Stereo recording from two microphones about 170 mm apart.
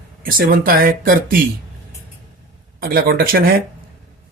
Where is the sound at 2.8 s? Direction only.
60° right (ahead or behind).